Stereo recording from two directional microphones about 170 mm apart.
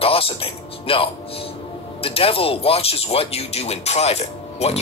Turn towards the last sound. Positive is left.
turn(degrees=40)  # may be behind; listen again after turning